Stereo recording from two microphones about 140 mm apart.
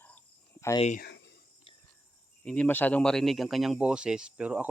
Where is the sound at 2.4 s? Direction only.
10° left (ahead or behind).